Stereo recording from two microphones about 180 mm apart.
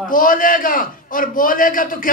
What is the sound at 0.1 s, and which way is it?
A man's voice, 50° left (ahead or behind).